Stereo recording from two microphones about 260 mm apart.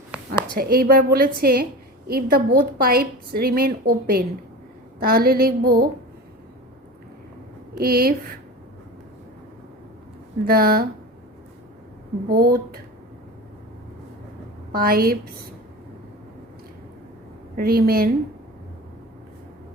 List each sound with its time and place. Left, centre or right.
0.5 s a woman's voice: right
7.8 s a woman's voice: right
10.4 s a woman's voice: right
12.3 s a woman's voice: right
14.7 s a woman's voice: right
17.6 s a woman's voice: right